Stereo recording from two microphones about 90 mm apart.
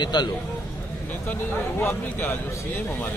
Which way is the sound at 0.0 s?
55° left (ahead or behind).